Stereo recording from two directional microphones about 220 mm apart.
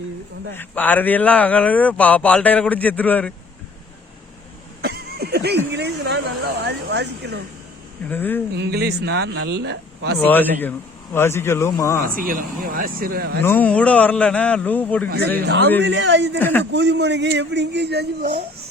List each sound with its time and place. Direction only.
0.5 s speech: 10° left (ahead or behind)
4.8 s a sound: 45° right (ahead or behind)
5.7 s speech: 50° right (ahead or behind)
8.1 s speech: 10° left (ahead or behind)
8.5 s speech: 50° right (ahead or behind)
10.2 s speech: 10° left (ahead or behind)
12.0 s speech: 40° right (ahead or behind)
13.4 s a man's voice: 10° left (ahead or behind)
15.4 s speech: 50° right (ahead or behind)
16.4 s speech: 10° left (ahead or behind)
16.7 s speech: 50° right (ahead or behind)